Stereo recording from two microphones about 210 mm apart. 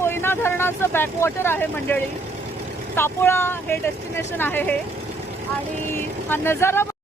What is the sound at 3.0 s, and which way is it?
Speech, 10° left (ahead or behind).